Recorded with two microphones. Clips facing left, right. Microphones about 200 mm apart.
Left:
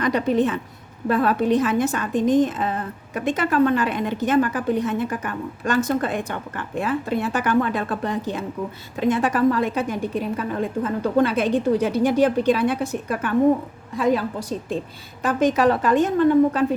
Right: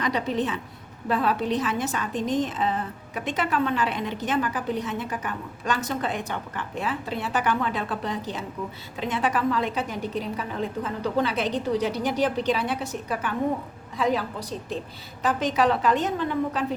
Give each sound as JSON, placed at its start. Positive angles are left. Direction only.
{"t": 0.0, "sound": "a woman's voice", "side_deg": 50}